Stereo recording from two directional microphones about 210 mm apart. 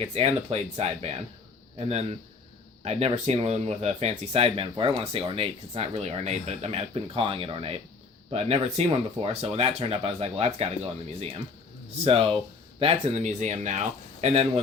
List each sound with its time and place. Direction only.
0.0 s speech: 30° right (ahead or behind)
12.0 s speech: 25° right (ahead or behind)